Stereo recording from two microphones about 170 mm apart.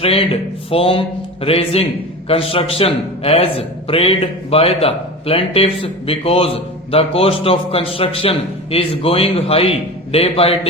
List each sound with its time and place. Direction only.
0.0 s a man's voice: 35° left (ahead or behind)